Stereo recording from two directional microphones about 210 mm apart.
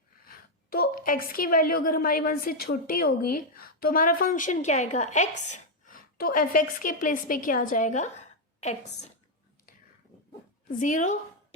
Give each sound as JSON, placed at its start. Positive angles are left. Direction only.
{"t": 0.3, "sound": "a woman's voice", "side_deg": 45}
{"t": 10.7, "sound": "a woman's voice", "side_deg": 35}